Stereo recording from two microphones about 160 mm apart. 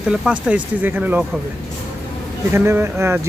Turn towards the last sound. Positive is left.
turn(degrees=-15)  # may be behind; listen again after turning